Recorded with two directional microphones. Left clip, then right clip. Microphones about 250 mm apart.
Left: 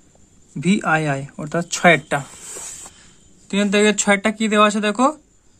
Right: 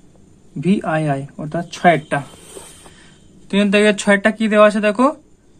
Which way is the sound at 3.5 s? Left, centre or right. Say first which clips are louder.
Right 3 dB; centre.